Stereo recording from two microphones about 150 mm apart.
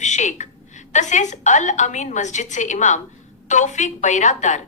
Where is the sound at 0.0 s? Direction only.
50° left (ahead or behind).